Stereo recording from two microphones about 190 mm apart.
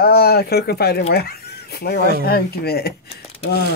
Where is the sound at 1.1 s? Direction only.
55° left (ahead or behind).